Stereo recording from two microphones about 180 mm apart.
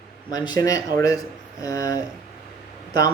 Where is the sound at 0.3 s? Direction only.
20° left (ahead or behind).